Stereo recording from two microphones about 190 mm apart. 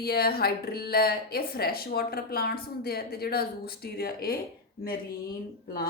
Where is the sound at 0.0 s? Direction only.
55° left (ahead or behind).